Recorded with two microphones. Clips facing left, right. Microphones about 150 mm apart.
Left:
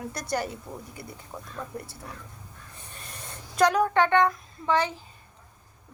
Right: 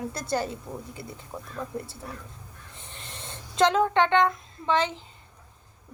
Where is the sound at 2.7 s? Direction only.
25° right (ahead or behind).